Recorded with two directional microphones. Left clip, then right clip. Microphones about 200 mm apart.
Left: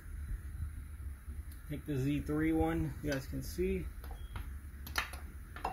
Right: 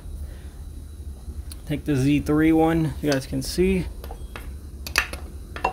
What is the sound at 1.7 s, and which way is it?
Speech, 30° right (ahead or behind).